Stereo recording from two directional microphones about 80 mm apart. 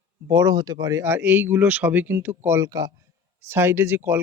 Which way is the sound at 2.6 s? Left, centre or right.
Right.